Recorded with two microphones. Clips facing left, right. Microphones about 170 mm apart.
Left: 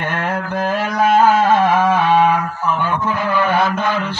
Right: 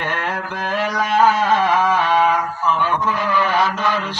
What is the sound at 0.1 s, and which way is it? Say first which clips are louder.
Mantra: left 4 dB; 50° left (ahead or behind).